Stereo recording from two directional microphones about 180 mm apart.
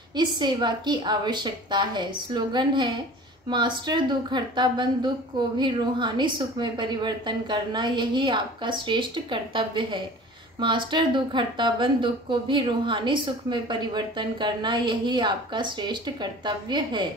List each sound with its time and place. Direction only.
0.1 s speech: 25° right (ahead or behind)